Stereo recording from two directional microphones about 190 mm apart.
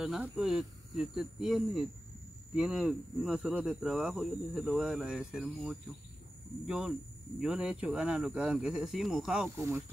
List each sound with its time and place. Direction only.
0.0 s speech: 5° right (ahead or behind)
9.6 s speech: 15° right (ahead or behind)